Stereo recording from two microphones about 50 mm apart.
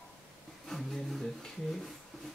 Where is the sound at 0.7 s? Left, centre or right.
Centre.